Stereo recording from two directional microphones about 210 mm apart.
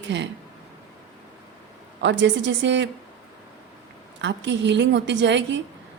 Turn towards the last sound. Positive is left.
turn(degrees=-60)  # may be behind; listen again after turning